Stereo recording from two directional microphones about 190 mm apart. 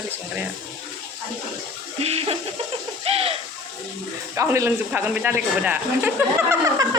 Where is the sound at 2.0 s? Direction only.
30° right (ahead or behind).